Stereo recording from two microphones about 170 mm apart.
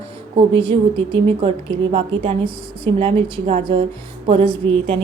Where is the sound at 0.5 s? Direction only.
30° right (ahead or behind).